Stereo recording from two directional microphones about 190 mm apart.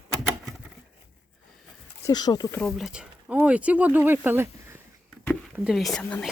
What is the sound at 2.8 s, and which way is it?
Speech, 5° right (ahead or behind).